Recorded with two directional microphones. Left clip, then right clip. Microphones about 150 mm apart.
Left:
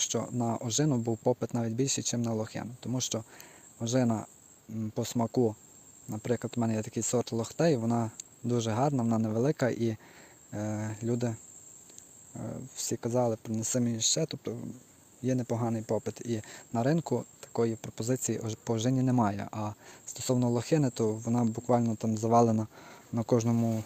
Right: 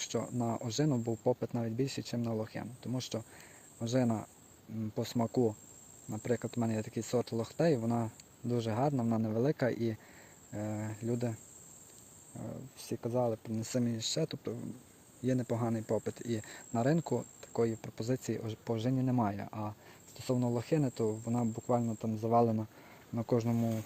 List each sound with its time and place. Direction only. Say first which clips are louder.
0.0 s speech: left 4 dB; 35° left (ahead or behind)
12.4 s speech: left 7 dB; 50° left (ahead or behind)